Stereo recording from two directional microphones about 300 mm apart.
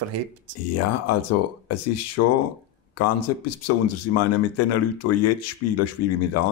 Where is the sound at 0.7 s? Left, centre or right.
Left.